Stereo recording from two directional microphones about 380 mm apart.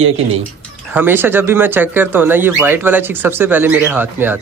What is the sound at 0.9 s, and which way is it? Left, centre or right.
Speech, centre.